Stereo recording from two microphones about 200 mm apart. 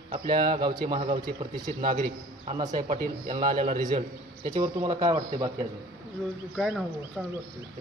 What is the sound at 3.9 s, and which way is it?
A man's voice, 30° right (ahead or behind).